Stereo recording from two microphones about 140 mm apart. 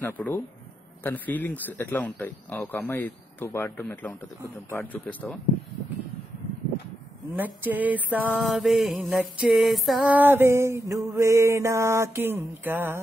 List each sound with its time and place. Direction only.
0.2 s speech: 15° left (ahead or behind)
7.6 s mantra: 10° right (ahead or behind)
10.1 s mantra: 15° right (ahead or behind)